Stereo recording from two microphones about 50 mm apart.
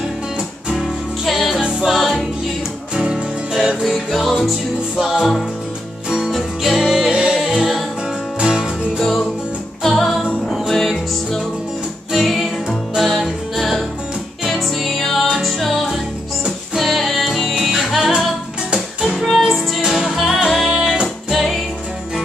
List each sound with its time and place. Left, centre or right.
1.2 s music: centre
2.9 s music: centre
3.8 s music: centre
6.0 s music: centre
6.3 s music: centre
7.3 s music: centre
9.8 s music: centre
20.7 s music: centre